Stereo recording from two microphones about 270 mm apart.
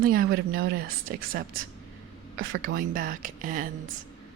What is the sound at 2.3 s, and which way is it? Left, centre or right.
A woman's voice, right.